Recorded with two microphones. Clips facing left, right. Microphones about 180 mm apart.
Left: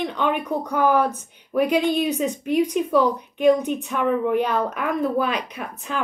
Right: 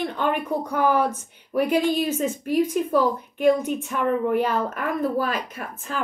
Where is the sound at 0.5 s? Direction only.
15° left (ahead or behind).